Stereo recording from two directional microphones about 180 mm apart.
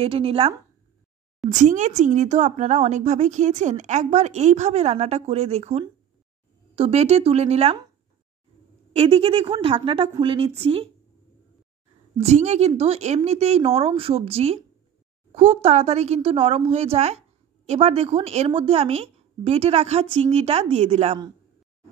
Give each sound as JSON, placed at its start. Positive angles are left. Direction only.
{"t": 0.0, "sound": "speech", "side_deg": -30}
{"t": 1.5, "sound": "speech", "side_deg": -40}
{"t": 8.9, "sound": "a woman's voice", "side_deg": -30}
{"t": 12.2, "sound": "speech", "side_deg": -40}